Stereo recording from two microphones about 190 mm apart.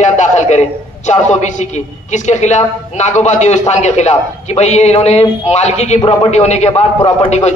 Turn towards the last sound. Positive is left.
turn(degrees=35)  # may be behind; listen again after turning